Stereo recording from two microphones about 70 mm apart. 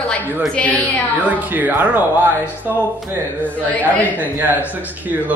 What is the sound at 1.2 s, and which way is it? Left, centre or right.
Speech, right.